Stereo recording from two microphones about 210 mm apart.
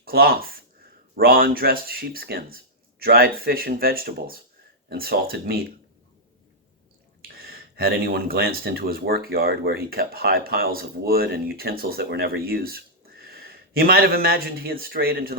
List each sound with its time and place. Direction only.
0.0 s speech: 45° right (ahead or behind)
7.3 s speech: 45° right (ahead or behind)